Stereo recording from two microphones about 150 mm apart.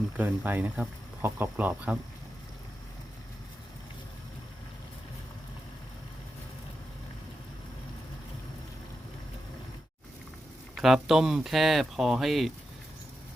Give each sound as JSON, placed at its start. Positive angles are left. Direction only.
{"t": 0.2, "sound": "speech", "side_deg": -10}
{"t": 10.8, "sound": "speech", "side_deg": 0}